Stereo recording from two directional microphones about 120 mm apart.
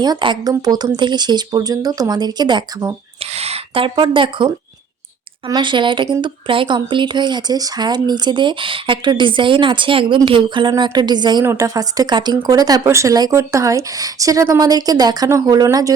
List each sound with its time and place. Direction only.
0.0 s speech: 40° right (ahead or behind)
3.2 s speech: 60° right (ahead or behind); by 11.4 s 35° right (ahead or behind)
11.4 s speech: 25° right (ahead or behind)